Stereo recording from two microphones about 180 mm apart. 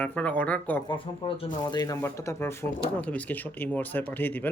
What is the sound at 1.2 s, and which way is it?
Speech, 25° left (ahead or behind).